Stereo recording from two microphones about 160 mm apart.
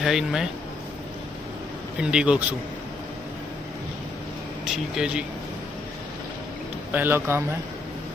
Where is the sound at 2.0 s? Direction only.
5° right (ahead or behind).